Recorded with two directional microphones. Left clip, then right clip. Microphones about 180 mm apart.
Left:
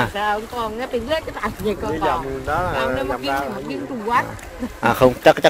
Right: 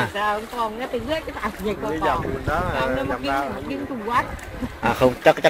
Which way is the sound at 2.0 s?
70° left (ahead or behind).